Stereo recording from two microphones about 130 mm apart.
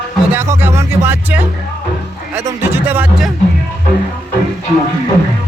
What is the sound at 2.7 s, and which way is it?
Speech, 15° right (ahead or behind).